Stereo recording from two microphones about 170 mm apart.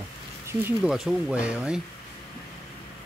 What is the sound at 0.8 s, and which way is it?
Speech, 5° right (ahead or behind).